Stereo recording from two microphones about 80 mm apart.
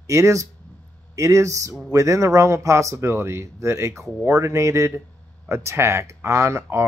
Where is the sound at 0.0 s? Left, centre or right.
Right.